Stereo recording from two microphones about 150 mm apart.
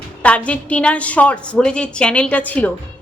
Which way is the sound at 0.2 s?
10° left (ahead or behind).